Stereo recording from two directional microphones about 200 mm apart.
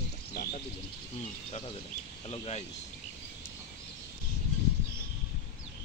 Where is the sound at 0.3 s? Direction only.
55° left (ahead or behind).